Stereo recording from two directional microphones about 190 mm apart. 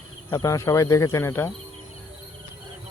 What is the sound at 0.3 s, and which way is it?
Speech, 15° left (ahead or behind).